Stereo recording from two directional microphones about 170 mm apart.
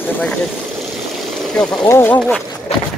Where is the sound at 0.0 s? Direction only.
5° left (ahead or behind).